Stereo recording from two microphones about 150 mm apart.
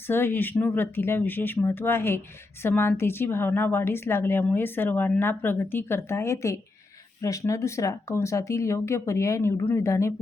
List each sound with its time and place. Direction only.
0.1 s a woman's voice: 15° left (ahead or behind)